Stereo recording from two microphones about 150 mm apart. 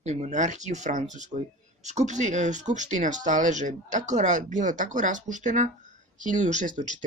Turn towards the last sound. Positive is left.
turn(degrees=-60)  # may be behind; listen again after turning